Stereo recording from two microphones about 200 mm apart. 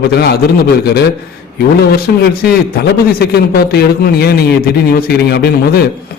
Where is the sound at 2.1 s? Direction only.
45° left (ahead or behind).